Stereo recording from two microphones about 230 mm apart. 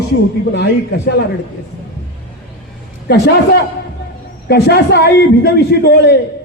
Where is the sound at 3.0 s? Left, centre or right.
Left.